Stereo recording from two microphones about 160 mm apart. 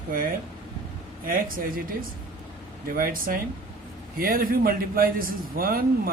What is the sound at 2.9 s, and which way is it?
A man's voice, 60° right (ahead or behind).